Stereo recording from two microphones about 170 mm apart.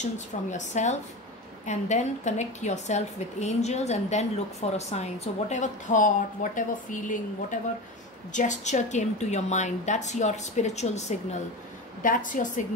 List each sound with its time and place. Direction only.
0.0 s a woman's voice: 45° left (ahead or behind)
12.0 s a woman's voice: 50° left (ahead or behind)